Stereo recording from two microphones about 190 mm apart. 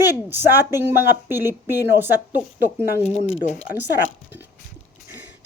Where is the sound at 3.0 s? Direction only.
35° left (ahead or behind).